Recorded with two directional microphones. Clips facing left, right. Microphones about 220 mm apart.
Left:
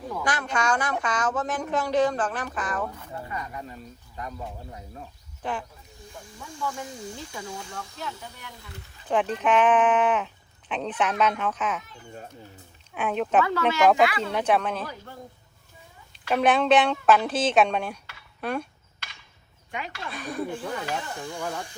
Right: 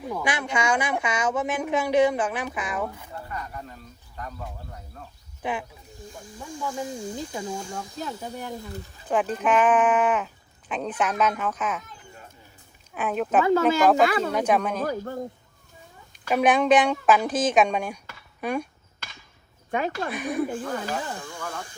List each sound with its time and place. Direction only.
0.1 s a woman's voice: 10° right (ahead or behind)
3.2 s speech: 10° left (ahead or behind)
5.4 s speech: 10° right (ahead or behind)
6.7 s speech: 30° right (ahead or behind)
9.0 s a woman's voice: 5° right (ahead or behind)
12.9 s speech: 5° right (ahead or behind)
13.6 s speech: 45° right (ahead or behind)
14.4 s a woman's voice: 10° right (ahead or behind)
14.8 s speech: 45° right (ahead or behind)
16.3 s a woman's voice: 10° right (ahead or behind)
19.7 s speech: 50° right (ahead or behind)
20.1 s speech: 20° right (ahead or behind)
21.2 s speech: 15° left (ahead or behind)